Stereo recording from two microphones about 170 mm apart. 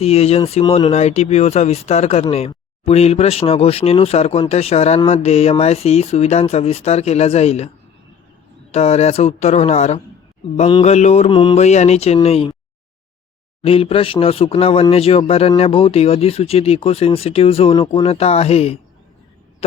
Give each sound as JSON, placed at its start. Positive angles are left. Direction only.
{"t": 0.0, "sound": "speech", "side_deg": 35}
{"t": 8.7, "sound": "speech", "side_deg": 40}
{"t": 10.7, "sound": "a sound", "side_deg": 30}
{"t": 10.9, "sound": "speech", "side_deg": 40}
{"t": 11.3, "sound": "speech", "side_deg": 30}
{"t": 13.6, "sound": "speech", "side_deg": 35}